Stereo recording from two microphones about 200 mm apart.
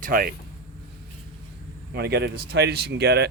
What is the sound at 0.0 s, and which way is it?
Speech, 45° right (ahead or behind).